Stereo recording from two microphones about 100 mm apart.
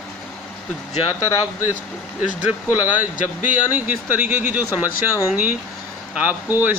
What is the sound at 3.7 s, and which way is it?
Speech, 20° right (ahead or behind).